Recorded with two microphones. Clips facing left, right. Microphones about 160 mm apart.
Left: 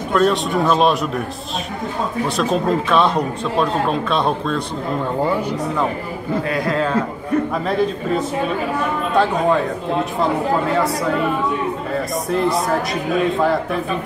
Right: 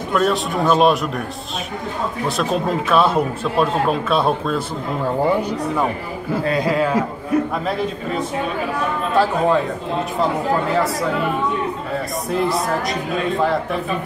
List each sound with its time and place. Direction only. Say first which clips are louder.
0.1 s speech: left 2 dB; centre (ahead or behind)
2.2 s speech: left 1 dB; centre (ahead or behind)
6.4 s a man's voice: right 5 dB; 25° right (ahead or behind)
6.7 s a man's voice: right 1 dB; 10° right (ahead or behind)
9.1 s speech: even; centre (ahead or behind)
12.3 s speech: left 1 dB; centre (ahead or behind)